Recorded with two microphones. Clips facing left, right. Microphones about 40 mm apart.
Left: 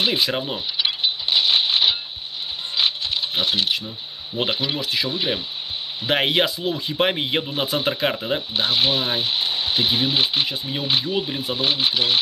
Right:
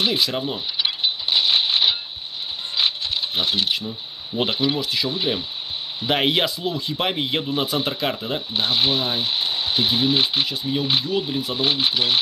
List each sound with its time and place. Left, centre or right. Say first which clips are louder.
0.0 s a man's voice: even; centre
0.7 s a sound: left 2 dB; centre
2.8 s coin: even; centre
4.4 s a man's voice: right 2 dB; centre
8.9 s a sound: even; centre
9.8 s a man's voice: right 1 dB; centre